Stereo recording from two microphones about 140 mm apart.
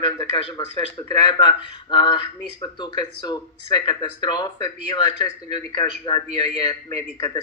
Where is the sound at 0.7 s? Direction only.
30° left (ahead or behind).